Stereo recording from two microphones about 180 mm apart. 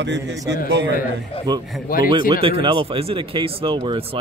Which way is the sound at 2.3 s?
30° right (ahead or behind).